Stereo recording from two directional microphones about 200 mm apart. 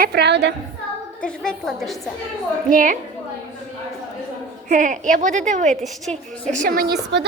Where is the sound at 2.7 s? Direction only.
40° right (ahead or behind).